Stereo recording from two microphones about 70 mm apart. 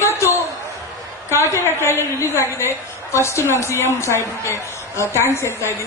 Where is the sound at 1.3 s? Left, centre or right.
Left.